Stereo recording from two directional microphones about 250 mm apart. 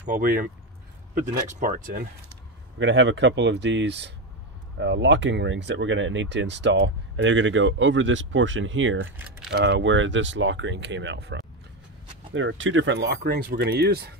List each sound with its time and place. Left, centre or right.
0.1 s speech: right
2.8 s speech: right